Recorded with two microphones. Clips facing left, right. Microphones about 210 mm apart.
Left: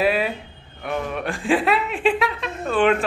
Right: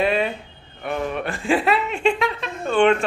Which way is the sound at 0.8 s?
Centre (ahead or behind).